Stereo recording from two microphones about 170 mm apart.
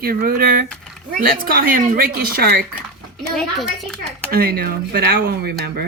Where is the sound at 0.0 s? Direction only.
60° right (ahead or behind).